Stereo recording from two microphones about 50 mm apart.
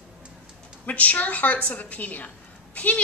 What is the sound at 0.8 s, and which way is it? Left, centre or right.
A woman's voice, left.